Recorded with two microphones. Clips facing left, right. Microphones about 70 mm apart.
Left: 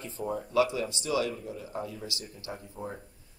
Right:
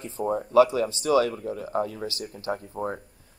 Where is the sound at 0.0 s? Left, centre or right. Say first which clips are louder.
Right 6 dB; right.